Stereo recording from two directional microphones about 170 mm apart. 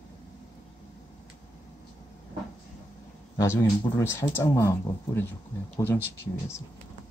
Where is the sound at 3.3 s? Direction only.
15° left (ahead or behind).